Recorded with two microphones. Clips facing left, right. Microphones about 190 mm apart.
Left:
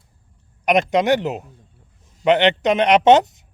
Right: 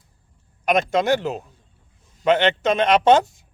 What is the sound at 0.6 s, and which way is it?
A man's voice, 15° left (ahead or behind).